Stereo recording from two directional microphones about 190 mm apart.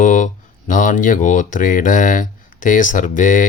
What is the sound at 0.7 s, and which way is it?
Speech, 45° left (ahead or behind).